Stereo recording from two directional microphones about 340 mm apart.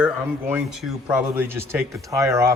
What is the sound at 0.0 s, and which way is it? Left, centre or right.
Speech, centre.